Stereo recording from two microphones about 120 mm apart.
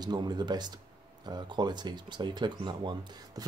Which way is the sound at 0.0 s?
35° right (ahead or behind).